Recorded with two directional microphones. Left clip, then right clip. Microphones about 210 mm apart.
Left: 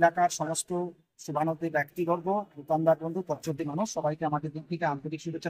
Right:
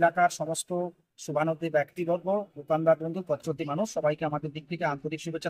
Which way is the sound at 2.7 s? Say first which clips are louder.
Right 1 dB; 5° right (ahead or behind).